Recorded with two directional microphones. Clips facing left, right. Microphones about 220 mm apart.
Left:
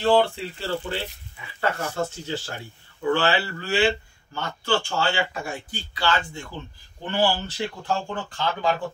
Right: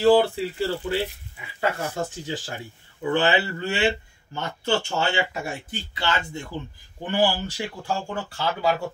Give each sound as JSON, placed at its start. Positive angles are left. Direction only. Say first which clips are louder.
{"t": 0.0, "sound": "speech", "louder": "right 3 dB", "side_deg": -5}